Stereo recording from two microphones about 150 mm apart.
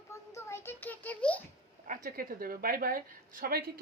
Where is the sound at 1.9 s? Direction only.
75° right (ahead or behind); by 3.7 s 90° right.